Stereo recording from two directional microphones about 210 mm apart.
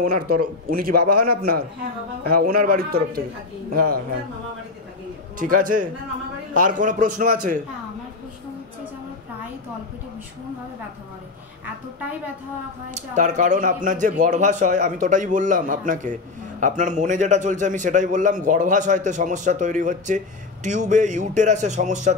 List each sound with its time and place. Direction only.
0.0 s speech: 45° right (ahead or behind)
5.4 s a man's voice: 40° right (ahead or behind)
12.9 s a man's voice: 35° right (ahead or behind)